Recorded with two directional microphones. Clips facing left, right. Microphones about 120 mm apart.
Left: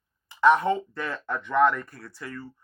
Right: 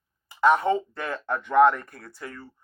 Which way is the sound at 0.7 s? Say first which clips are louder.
Right 2 dB; 20° right (ahead or behind).